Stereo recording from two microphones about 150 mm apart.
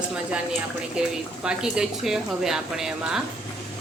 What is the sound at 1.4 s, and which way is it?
A woman's voice, 5° right (ahead or behind).